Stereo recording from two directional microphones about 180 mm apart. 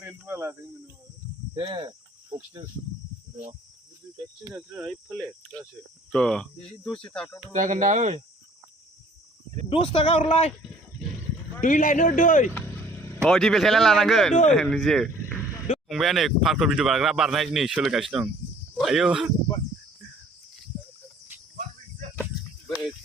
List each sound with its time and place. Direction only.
0.0 s speech: 10° right (ahead or behind)
1.5 s speech: 25° right (ahead or behind)
4.4 s speech: 5° right (ahead or behind)
7.5 s speech: 45° right (ahead or behind)
9.6 s a man's voice: 30° left (ahead or behind)
11.6 s a man's voice: 45° left (ahead or behind)
13.2 s speech: centre (ahead or behind)
21.5 s cricket: 45° right (ahead or behind)